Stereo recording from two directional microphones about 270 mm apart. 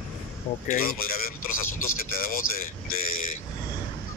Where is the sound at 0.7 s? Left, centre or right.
Left.